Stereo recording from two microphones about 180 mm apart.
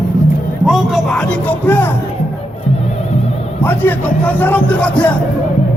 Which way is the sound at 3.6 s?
10° left (ahead or behind).